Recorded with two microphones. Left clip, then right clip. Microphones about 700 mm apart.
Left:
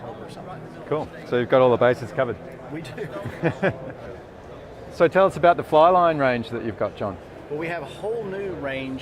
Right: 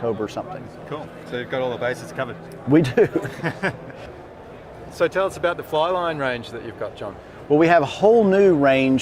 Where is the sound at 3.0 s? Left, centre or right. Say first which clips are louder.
Right 16 dB; right.